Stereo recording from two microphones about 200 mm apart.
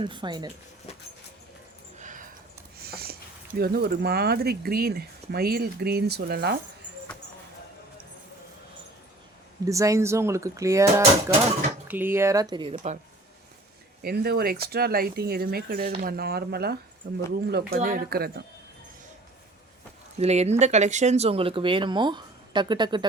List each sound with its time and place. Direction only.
0.0 s speech: 25° right (ahead or behind)
2.0 s a sound: 40° right (ahead or behind)
2.8 s a sound: 50° right (ahead or behind)
3.6 s speech: 50° right (ahead or behind)
9.6 s speech: 15° right (ahead or behind)
14.0 s speech: 50° right (ahead or behind)
20.1 s speech: 35° right (ahead or behind)